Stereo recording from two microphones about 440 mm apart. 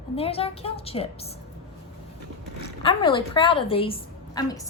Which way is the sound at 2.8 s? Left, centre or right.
Centre.